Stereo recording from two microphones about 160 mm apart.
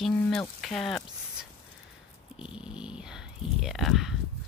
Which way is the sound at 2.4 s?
5° right (ahead or behind).